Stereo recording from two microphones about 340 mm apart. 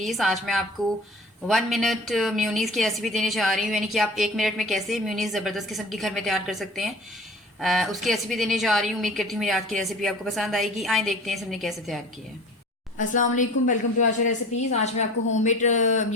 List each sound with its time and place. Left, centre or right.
0.0 s a woman's voice: centre
13.0 s a woman's voice: left